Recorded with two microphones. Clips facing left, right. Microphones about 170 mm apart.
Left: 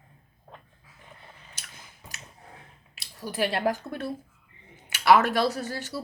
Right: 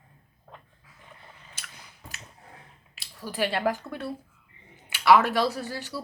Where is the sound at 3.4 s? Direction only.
40° left (ahead or behind).